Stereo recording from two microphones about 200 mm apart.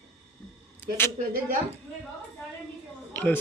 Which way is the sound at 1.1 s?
40° right (ahead or behind).